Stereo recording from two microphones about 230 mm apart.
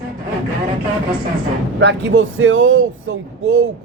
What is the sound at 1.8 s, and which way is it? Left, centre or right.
Speech, right.